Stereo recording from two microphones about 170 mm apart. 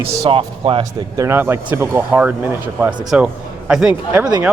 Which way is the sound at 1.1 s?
15° right (ahead or behind).